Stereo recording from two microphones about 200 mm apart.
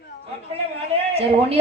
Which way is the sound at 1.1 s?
30° right (ahead or behind).